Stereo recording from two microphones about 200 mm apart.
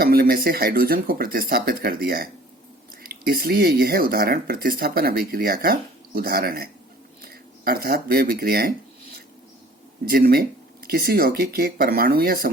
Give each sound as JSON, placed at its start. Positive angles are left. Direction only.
{"t": 0.0, "sound": "speech", "side_deg": -50}
{"t": 10.1, "sound": "speech", "side_deg": -45}